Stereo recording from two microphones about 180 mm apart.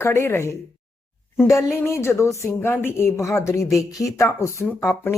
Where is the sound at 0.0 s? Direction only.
15° left (ahead or behind).